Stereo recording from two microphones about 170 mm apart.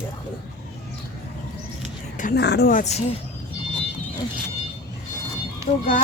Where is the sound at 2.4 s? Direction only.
75° left (ahead or behind).